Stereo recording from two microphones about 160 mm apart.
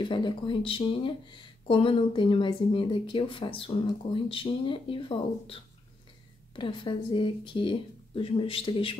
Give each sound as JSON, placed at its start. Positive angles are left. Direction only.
{"t": 0.0, "sound": "speech", "side_deg": 30}